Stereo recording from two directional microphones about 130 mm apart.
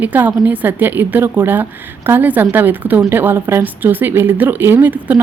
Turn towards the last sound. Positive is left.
turn(degrees=-15)  # may be behind; listen again after turning